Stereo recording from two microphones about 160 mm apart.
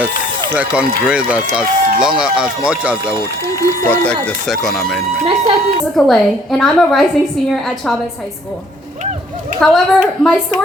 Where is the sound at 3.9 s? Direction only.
5° left (ahead or behind).